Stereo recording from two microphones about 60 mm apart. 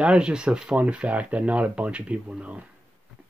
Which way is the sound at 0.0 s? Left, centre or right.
Centre.